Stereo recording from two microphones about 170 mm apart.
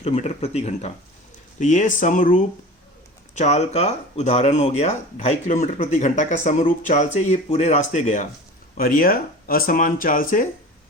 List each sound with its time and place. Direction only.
0.0 s speech: 40° left (ahead or behind)
8.8 s speech: 60° left (ahead or behind)